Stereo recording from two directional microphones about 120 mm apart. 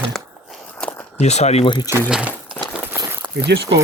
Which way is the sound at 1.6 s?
40° left (ahead or behind).